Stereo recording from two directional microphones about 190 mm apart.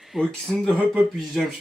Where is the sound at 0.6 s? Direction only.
Centre (ahead or behind).